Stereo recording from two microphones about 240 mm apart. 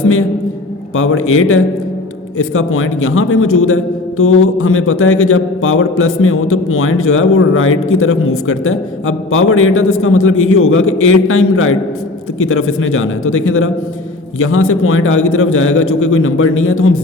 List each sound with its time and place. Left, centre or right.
0.9 s speech: left